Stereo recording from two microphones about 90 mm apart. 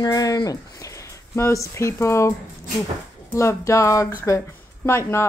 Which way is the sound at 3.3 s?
35° left (ahead or behind).